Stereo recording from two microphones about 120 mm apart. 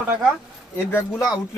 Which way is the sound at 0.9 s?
15° left (ahead or behind).